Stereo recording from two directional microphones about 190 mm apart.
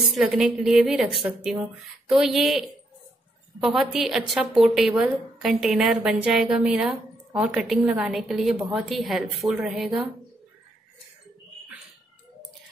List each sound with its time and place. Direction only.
0.0 s a woman's voice: 5° right (ahead or behind)
3.6 s a woman's voice: centre (ahead or behind)